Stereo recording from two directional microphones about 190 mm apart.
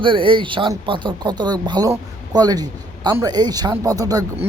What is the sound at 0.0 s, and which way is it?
A man's voice, 25° right (ahead or behind).